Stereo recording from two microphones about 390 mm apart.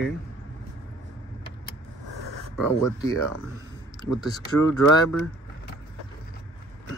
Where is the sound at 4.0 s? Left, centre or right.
Centre.